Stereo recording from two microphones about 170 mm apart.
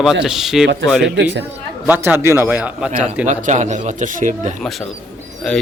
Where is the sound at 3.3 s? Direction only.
45° right (ahead or behind).